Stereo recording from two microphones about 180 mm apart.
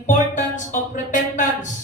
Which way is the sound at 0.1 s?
45° left (ahead or behind).